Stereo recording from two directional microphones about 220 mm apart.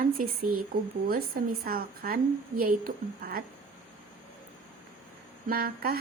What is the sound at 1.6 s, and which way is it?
A woman's voice, 45° right (ahead or behind).